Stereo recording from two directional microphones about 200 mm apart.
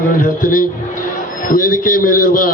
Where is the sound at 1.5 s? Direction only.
45° left (ahead or behind).